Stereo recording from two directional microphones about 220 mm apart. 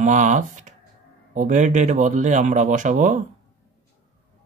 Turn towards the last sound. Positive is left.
turn(degrees=-35)  # may be behind; listen again after turning